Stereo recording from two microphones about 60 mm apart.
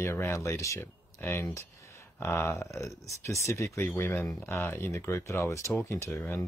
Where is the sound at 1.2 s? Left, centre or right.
Left.